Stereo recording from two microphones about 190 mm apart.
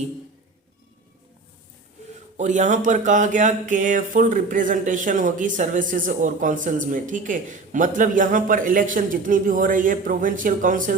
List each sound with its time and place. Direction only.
2.4 s speech: 40° right (ahead or behind)